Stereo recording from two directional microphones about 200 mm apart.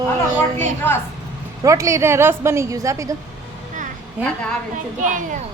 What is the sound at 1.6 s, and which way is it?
A woman's voice, 15° right (ahead or behind).